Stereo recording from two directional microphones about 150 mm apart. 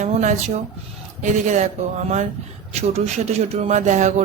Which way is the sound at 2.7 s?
45° right (ahead or behind).